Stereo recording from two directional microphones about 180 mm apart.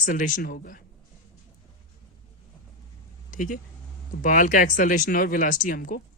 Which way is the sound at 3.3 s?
45° left (ahead or behind).